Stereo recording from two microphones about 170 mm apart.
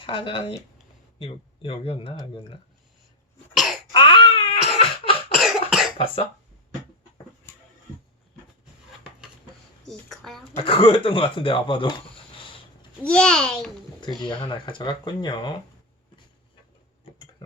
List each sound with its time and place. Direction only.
0.0 s speech: 30° left (ahead or behind)
3.9 s baby cry: 30° left (ahead or behind)
4.8 s cough: 35° left (ahead or behind)
5.4 s cough: centre (ahead or behind)
9.8 s a woman's voice: centre (ahead or behind)
10.5 s speech: 30° left (ahead or behind)
13.1 s a child's voice: 5° left (ahead or behind)
14.2 s speech: 30° left (ahead or behind)